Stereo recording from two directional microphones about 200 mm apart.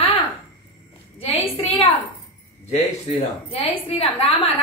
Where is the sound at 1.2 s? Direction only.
30° left (ahead or behind).